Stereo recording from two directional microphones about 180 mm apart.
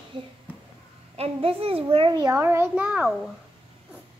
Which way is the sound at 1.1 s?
35° right (ahead or behind).